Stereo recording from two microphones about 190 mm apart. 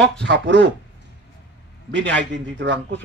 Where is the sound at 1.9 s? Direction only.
70° right (ahead or behind).